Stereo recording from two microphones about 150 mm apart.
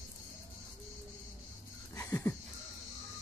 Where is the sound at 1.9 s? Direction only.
20° left (ahead or behind).